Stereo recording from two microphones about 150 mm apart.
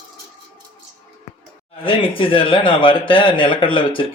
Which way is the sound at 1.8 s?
35° left (ahead or behind).